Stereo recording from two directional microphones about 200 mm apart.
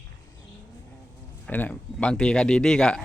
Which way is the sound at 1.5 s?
10° left (ahead or behind).